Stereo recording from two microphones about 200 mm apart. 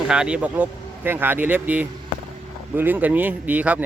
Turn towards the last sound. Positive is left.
turn(degrees=-5)  # may be behind; listen again after turning